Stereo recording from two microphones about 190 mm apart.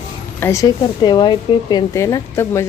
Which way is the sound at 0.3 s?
15° left (ahead or behind).